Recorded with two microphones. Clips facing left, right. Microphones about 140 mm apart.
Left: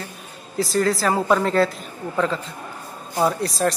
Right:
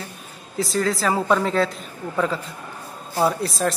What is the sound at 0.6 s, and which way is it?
A woman's voice, centre (ahead or behind).